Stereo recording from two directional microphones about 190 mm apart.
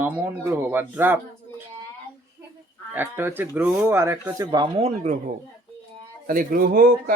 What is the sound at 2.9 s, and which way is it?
Speech, 10° right (ahead or behind).